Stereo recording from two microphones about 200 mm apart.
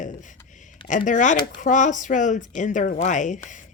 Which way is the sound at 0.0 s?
40° left (ahead or behind).